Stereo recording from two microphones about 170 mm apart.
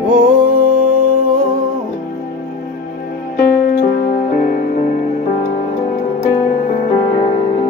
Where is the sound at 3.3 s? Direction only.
65° left (ahead or behind).